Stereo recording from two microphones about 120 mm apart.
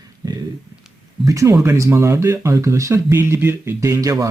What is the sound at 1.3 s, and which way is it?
Speech, 25° right (ahead or behind).